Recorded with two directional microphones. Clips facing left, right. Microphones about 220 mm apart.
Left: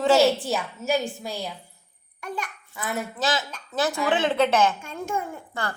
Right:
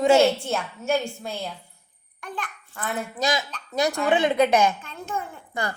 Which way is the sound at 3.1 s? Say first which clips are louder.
Right 1 dB; 15° right (ahead or behind).